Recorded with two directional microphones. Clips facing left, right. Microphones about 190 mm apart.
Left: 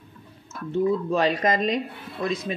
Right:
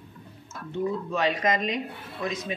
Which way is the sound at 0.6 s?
35° left (ahead or behind).